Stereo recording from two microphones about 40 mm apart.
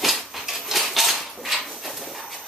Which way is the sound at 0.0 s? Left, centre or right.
Centre.